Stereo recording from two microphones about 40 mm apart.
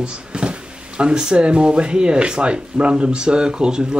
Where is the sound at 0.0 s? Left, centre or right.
Right.